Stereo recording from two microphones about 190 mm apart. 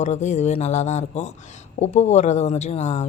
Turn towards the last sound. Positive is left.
turn(degrees=35)  # may be behind; listen again after turning